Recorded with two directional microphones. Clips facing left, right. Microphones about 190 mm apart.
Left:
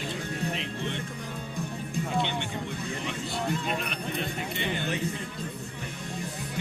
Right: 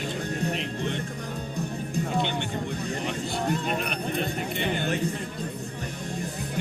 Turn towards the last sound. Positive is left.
turn(degrees=-45)  # may be behind; listen again after turning